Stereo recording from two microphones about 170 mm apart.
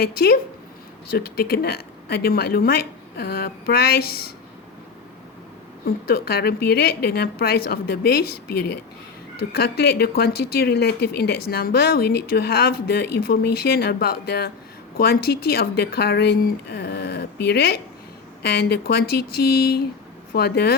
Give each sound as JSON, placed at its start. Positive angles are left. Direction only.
{"t": 0.0, "sound": "a woman's voice", "side_deg": 65}
{"t": 5.8, "sound": "a woman's voice", "side_deg": 60}